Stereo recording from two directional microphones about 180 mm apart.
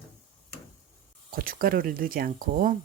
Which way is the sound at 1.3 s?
55° right (ahead or behind).